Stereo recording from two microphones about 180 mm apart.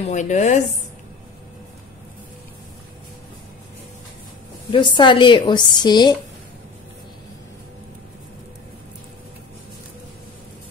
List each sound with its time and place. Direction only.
0.0 s speech: 40° left (ahead or behind)
4.6 s a woman's voice: 25° left (ahead or behind)